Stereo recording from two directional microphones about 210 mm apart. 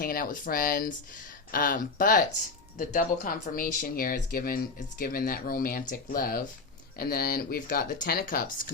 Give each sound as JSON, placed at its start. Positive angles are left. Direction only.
{"t": 0.0, "sound": "speech", "side_deg": 45}